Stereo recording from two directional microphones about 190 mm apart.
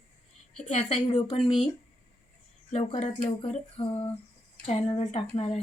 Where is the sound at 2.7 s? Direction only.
35° left (ahead or behind).